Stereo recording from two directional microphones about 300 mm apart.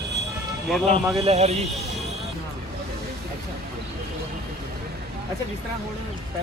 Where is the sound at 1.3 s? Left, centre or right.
Right.